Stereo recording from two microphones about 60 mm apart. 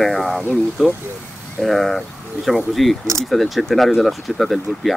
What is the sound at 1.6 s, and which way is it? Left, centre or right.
Speech, centre.